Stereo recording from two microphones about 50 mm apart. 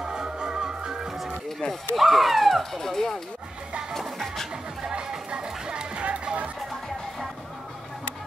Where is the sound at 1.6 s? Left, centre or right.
Left.